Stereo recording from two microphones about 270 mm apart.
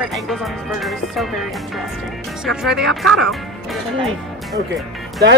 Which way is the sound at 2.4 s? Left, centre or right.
Centre.